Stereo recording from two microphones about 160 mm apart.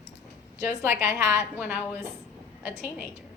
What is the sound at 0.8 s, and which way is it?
A woman's voice, 15° right (ahead or behind).